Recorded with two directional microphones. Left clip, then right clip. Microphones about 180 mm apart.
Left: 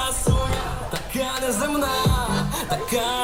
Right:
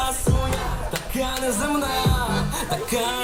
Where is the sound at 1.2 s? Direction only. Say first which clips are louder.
Left 1 dB; 15° left (ahead or behind).